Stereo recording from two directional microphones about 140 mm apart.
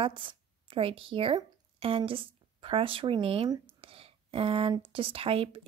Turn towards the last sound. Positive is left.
turn(degrees=-45)  # may be behind; listen again after turning